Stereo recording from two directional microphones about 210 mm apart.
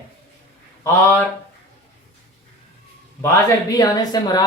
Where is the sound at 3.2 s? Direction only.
15° left (ahead or behind).